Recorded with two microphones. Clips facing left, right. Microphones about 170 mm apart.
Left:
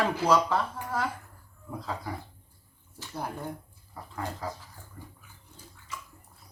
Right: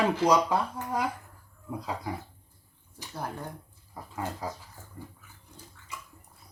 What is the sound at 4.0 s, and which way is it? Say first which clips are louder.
Speech: right 1 dB; 10° right (ahead or behind).